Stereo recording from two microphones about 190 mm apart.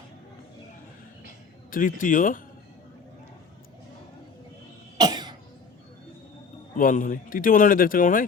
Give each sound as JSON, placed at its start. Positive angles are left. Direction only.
{"t": 1.7, "sound": "a man's voice", "side_deg": 45}
{"t": 4.9, "sound": "cough", "side_deg": -20}
{"t": 6.7, "sound": "a man's voice", "side_deg": 45}